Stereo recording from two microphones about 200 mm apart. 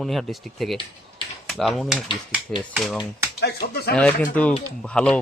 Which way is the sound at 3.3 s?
55° left (ahead or behind).